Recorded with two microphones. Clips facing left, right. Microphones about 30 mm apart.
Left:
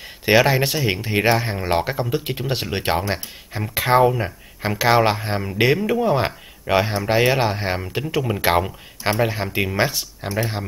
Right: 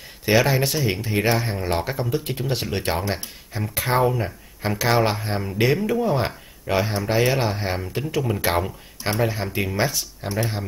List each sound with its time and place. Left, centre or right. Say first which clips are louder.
0.2 s speech: left 3 dB; left
10.2 s speech: left 2 dB; centre